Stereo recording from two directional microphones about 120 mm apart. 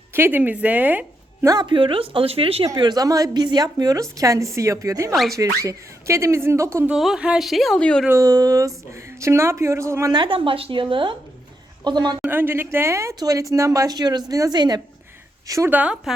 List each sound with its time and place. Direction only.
0.1 s speech: 15° right (ahead or behind)
1.5 s speech: 40° right (ahead or behind)
2.6 s a woman's voice: 35° right (ahead or behind)
6.8 s speech: 5° right (ahead or behind)
8.1 s speech: 30° right (ahead or behind)
10.1 s a woman's voice: 45° right (ahead or behind)
12.3 s speech: 15° right (ahead or behind)
15.7 s speech: 10° right (ahead or behind)